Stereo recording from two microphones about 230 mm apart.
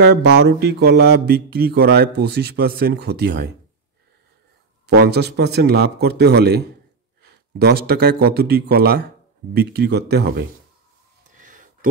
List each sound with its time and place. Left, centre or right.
0.0 s speech: right
4.8 s speech: right
11.3 s a sound: right